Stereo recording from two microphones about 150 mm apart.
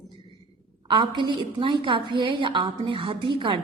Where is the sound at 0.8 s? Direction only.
35° right (ahead or behind).